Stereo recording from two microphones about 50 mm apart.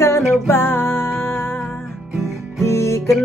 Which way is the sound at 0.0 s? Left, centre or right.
Left.